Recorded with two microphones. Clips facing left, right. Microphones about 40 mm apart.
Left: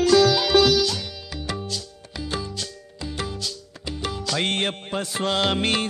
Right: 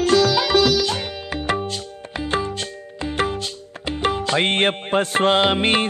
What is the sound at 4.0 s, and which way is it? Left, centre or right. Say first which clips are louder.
Music: right 6 dB; right.